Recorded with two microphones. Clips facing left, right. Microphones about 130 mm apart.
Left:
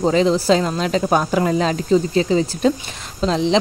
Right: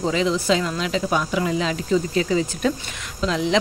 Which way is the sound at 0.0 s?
35° left (ahead or behind).